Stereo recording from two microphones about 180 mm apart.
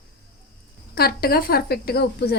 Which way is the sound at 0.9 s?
60° left (ahead or behind).